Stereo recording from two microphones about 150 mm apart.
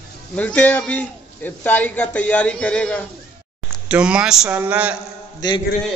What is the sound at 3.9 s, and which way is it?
A man's voice, 5° right (ahead or behind).